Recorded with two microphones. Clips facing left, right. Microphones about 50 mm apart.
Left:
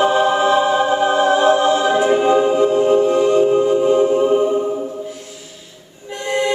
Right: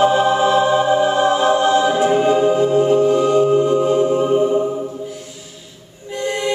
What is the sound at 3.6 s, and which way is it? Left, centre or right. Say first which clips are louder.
Music: left 1 dB; centre.